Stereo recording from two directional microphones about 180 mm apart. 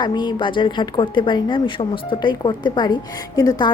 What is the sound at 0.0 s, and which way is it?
A woman's voice, 25° left (ahead or behind).